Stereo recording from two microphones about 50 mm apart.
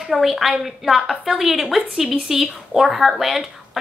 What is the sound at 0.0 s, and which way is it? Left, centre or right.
A woman's voice, centre.